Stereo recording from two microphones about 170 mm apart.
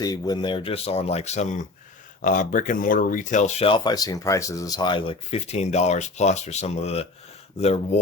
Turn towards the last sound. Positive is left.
turn(degrees=40)  # may be behind; listen again after turning